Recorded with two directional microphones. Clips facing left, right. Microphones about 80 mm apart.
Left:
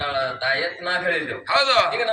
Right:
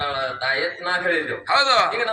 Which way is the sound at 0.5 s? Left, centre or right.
Right.